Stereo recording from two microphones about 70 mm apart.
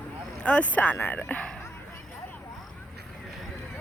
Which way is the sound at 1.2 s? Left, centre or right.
Centre.